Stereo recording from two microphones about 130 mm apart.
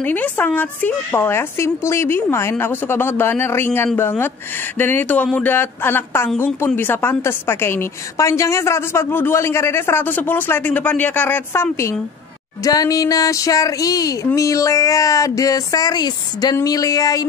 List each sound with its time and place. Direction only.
0.0 s a woman's voice: 15° left (ahead or behind); by 17.2 s 30° left (ahead or behind)